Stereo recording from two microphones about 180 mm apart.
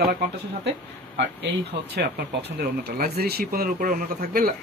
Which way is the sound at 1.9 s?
60° right (ahead or behind).